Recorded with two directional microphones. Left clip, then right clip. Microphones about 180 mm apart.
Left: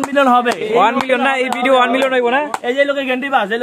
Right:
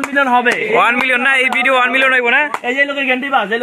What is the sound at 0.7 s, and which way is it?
A man's voice, 5° left (ahead or behind).